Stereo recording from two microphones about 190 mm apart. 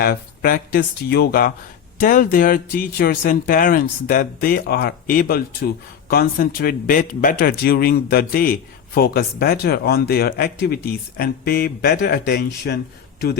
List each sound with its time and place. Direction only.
0.0 s speech: 50° left (ahead or behind)